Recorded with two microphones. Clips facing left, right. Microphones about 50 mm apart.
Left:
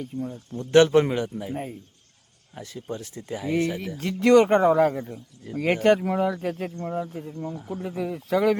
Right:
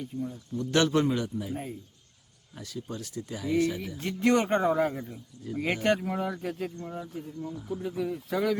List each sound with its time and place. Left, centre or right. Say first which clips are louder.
0.0 s speech: left 3 dB; left
0.7 s a man's voice: left 7 dB; left
3.8 s speech: left 4 dB; left
7.3 s speech: left 4 dB; left
7.7 s speech: left 1 dB; left